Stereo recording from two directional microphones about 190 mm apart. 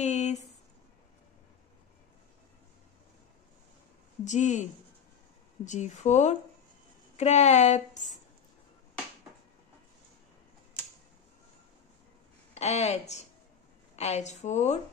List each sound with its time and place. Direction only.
0.0 s a sound: 35° left (ahead or behind)
4.2 s a woman's voice: 40° left (ahead or behind)
5.7 s a woman's voice: 40° left (ahead or behind)
12.5 s a woman's voice: 35° left (ahead or behind)